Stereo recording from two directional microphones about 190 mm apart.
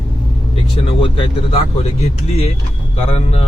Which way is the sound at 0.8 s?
30° left (ahead or behind).